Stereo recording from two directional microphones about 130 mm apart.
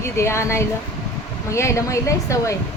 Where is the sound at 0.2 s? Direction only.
20° left (ahead or behind).